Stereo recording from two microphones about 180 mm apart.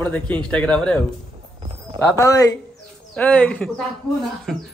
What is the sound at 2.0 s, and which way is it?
Speech, 15° left (ahead or behind).